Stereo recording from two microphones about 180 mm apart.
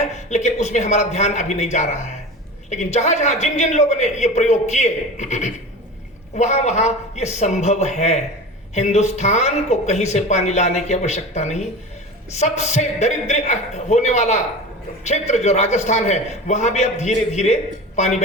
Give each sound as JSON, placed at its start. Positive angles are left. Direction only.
{"t": 0.1, "sound": "speech", "side_deg": 40}